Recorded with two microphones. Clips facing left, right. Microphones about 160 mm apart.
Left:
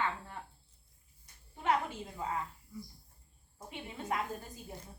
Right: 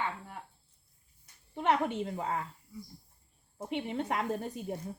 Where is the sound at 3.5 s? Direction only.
70° right (ahead or behind).